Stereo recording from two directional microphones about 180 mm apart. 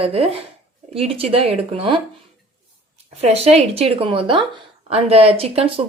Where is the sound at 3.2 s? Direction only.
35° right (ahead or behind).